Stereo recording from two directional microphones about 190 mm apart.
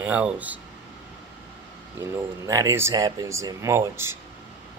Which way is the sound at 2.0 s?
15° right (ahead or behind).